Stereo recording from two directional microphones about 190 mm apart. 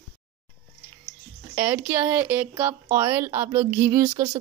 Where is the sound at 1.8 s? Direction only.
10° right (ahead or behind).